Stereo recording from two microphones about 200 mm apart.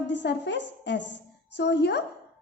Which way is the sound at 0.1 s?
60° left (ahead or behind).